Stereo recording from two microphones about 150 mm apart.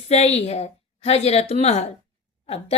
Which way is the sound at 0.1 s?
45° left (ahead or behind).